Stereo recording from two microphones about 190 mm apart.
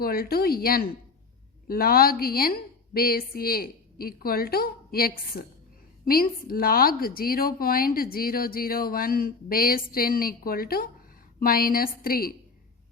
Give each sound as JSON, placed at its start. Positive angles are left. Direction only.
{"t": 0.0, "sound": "a woman's voice", "side_deg": 50}